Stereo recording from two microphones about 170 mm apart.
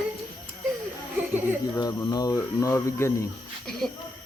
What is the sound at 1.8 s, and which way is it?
Mantra, 20° left (ahead or behind).